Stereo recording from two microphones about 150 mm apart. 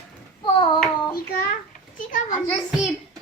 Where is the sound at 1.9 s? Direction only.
60° left (ahead or behind).